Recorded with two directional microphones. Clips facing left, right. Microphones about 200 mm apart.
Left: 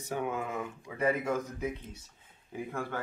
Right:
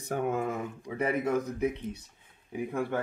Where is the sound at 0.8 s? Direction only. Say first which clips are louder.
Right 1 dB; 20° right (ahead or behind).